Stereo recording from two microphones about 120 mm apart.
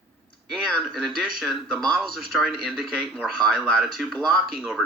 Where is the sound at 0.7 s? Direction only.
Centre (ahead or behind).